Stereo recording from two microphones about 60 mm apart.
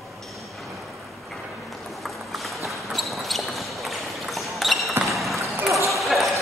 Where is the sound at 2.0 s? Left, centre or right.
Centre.